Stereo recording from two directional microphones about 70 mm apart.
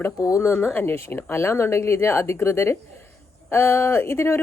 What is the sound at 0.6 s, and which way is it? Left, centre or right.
A woman's voice, left.